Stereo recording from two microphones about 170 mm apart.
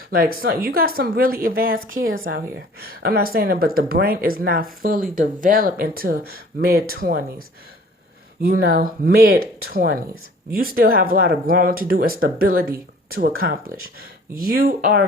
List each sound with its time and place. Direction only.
0.1 s speech: 60° right (ahead or behind)